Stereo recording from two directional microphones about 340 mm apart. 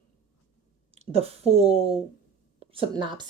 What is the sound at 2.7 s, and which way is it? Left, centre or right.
Speech, centre.